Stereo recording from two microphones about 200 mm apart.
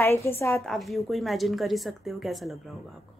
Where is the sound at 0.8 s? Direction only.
Centre (ahead or behind).